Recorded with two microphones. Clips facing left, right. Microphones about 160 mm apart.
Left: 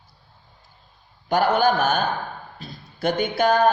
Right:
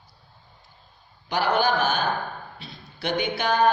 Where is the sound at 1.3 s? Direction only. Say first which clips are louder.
Left 4 dB; 45° left (ahead or behind).